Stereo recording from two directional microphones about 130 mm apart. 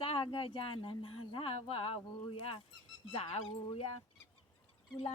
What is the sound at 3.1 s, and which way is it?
Speech, 50° left (ahead or behind).